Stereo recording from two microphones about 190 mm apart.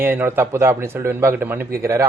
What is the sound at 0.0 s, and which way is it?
Speech, 10° right (ahead or behind).